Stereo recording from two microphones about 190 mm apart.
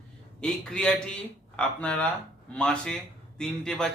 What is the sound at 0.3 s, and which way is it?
Speech, 5° left (ahead or behind).